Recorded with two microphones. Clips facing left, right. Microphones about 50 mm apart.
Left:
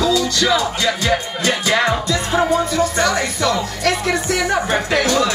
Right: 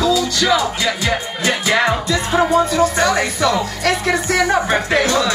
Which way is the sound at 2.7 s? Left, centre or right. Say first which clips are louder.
Right 2 dB; centre.